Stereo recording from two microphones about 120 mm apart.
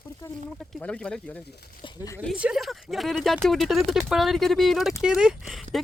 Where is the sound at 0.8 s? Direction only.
10° left (ahead or behind).